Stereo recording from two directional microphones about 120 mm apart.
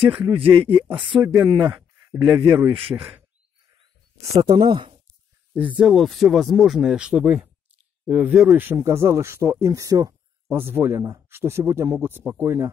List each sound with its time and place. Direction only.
0.3 s speech: 50° right (ahead or behind)
1.2 s speech: 20° right (ahead or behind)
4.2 s speech: 30° right (ahead or behind)
4.6 s speech: 45° right (ahead or behind)
5.5 s speech: 15° right (ahead or behind)
8.5 s speech: 20° right (ahead or behind)